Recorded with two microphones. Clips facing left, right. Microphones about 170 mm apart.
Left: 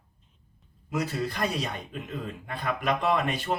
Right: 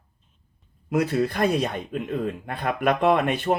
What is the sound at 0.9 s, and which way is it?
Speech, 55° right (ahead or behind).